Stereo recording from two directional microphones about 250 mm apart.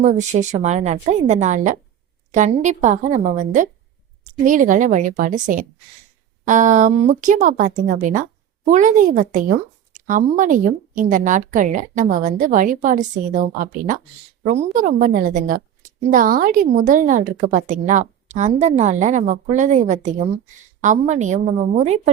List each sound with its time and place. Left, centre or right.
0.0 s a woman's voice: right